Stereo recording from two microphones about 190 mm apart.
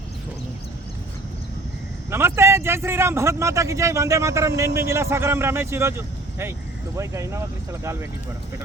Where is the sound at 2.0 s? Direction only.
15° right (ahead or behind).